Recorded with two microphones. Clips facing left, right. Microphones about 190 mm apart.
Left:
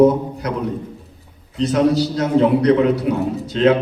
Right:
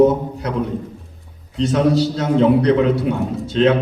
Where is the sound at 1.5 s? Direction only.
30° right (ahead or behind).